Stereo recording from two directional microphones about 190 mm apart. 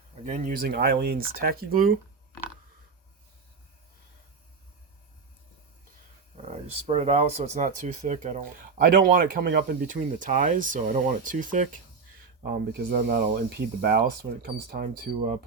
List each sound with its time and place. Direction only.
0.3 s speech: 45° right (ahead or behind)
6.3 s speech: 35° right (ahead or behind)
12.4 s speech: 55° right (ahead or behind)